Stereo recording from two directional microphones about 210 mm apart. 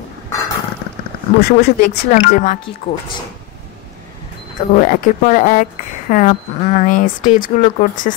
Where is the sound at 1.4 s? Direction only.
45° left (ahead or behind).